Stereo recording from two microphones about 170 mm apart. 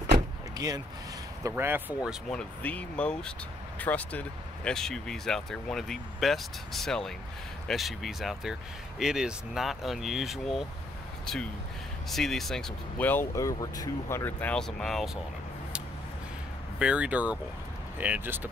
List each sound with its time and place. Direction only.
0.6 s speech: 20° right (ahead or behind)
1.5 s speech: 10° right (ahead or behind)
2.0 s speech: 5° left (ahead or behind)
12.1 s speech: centre (ahead or behind)
16.7 s speech: 5° right (ahead or behind)